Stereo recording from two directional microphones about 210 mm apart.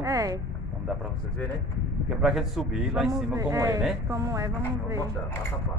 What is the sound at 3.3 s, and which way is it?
A woman's voice, 15° right (ahead or behind).